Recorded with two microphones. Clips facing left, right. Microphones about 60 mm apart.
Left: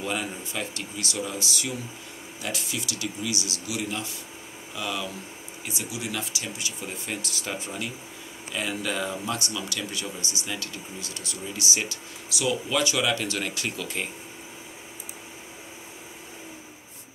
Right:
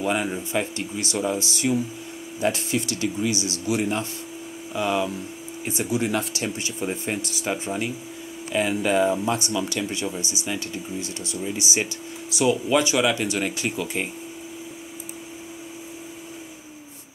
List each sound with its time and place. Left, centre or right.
0.0 s speech: centre; by 6.7 s right
6.8 s speech: right